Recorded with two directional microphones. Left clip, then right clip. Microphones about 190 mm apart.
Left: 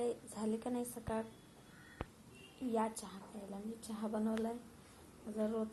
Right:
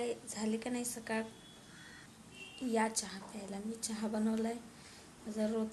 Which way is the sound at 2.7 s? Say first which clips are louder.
Right 4 dB; 15° right (ahead or behind).